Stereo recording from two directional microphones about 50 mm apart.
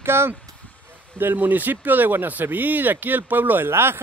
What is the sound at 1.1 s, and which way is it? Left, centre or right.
Speech, right.